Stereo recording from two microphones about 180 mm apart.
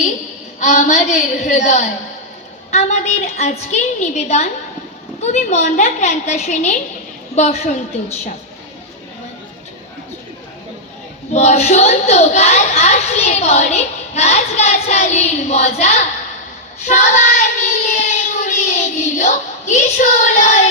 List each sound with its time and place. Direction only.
0.6 s a child's voice: 40° left (ahead or behind)
11.3 s a child's voice: 35° left (ahead or behind)
16.8 s child singing: 40° left (ahead or behind)